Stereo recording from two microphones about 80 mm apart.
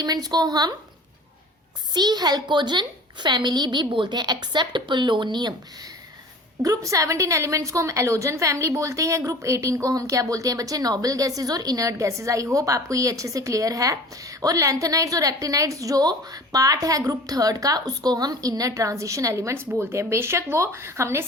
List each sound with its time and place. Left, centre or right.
0.0 s speech: right
1.9 s a woman's voice: right
6.6 s a woman's voice: right